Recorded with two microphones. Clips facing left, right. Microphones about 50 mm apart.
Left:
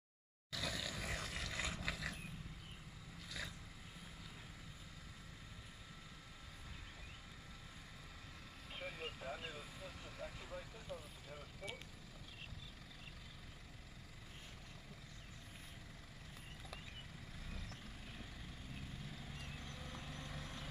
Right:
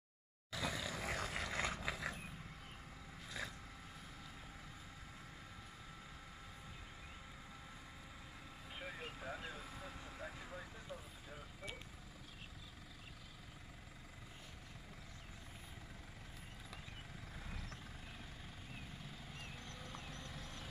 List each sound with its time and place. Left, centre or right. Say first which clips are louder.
0.5 s a sound: right 2 dB; right
3.3 s vehicle: right 2 dB; right
19.7 s vehicle: even; centre